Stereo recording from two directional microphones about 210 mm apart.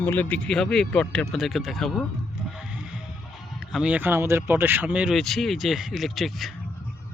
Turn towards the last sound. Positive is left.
turn(degrees=0)  # may be behind; listen again after turning